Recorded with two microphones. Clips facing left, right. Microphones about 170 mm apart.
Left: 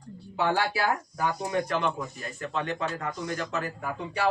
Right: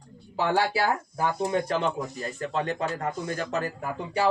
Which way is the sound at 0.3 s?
30° right (ahead or behind).